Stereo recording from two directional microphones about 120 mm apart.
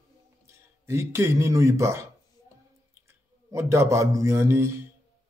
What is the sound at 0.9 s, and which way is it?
Speech, 20° right (ahead or behind).